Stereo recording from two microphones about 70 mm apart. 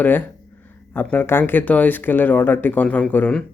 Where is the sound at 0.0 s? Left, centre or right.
Left.